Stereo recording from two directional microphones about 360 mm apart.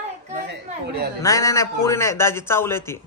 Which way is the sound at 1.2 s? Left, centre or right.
Centre.